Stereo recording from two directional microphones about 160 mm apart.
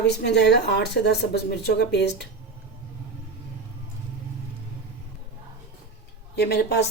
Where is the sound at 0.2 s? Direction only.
90° left.